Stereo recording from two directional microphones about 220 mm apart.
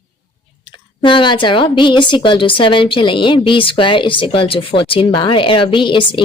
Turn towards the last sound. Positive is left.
turn(degrees=20)  # may be behind; listen again after turning